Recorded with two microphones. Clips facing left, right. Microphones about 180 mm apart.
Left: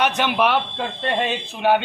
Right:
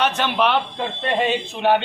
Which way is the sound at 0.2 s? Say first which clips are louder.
Even; 10° left (ahead or behind).